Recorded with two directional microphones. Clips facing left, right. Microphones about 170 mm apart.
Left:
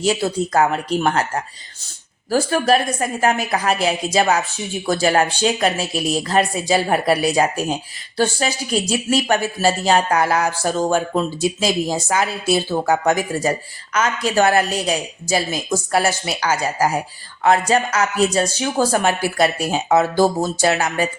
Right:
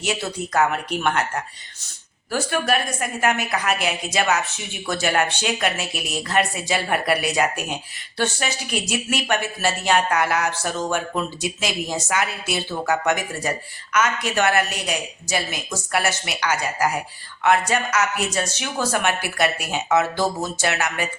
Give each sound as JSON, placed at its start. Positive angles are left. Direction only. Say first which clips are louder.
{"t": 0.0, "sound": "a woman's voice", "louder": "left 7 dB", "side_deg": 35}
{"t": 2.3, "sound": "a woman's voice", "louder": "left 6 dB", "side_deg": 35}